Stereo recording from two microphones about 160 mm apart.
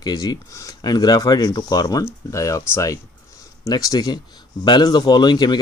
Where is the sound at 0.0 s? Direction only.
25° left (ahead or behind).